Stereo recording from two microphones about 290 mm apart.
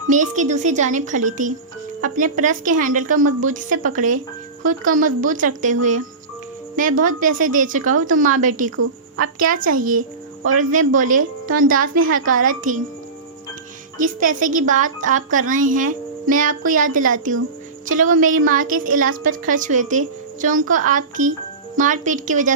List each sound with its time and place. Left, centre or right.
0.1 s a woman's voice: right
6.7 s a woman's voice: right
8.7 s a woman's voice: right
9.4 s a woman's voice: right
14.0 s a woman's voice: right